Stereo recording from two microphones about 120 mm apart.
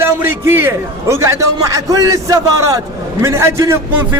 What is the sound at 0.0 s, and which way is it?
A man's voice, 20° right (ahead or behind).